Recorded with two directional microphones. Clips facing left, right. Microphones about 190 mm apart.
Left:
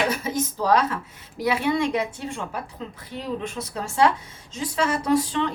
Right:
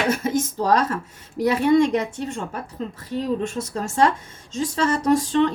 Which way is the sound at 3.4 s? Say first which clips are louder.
Right 4 dB; 45° right (ahead or behind).